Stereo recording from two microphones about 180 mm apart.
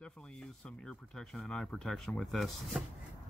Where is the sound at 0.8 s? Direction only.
5° left (ahead or behind).